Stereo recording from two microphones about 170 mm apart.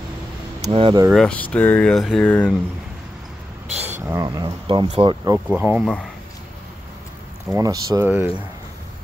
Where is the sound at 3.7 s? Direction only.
40° right (ahead or behind).